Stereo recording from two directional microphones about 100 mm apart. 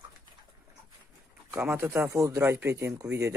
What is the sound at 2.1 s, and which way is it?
Speech, 30° right (ahead or behind).